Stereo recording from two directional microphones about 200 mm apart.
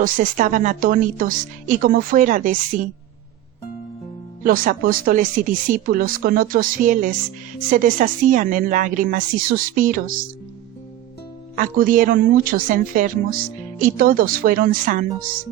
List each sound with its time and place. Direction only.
0.0 s a woman's voice: 40° right (ahead or behind)
4.4 s a woman's voice: 45° right (ahead or behind)
11.5 s a woman's voice: 40° right (ahead or behind)